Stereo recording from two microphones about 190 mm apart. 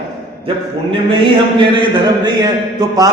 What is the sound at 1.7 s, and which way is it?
A man's voice, 25° right (ahead or behind).